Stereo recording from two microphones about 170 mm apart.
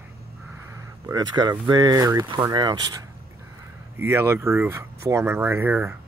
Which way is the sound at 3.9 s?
15° right (ahead or behind).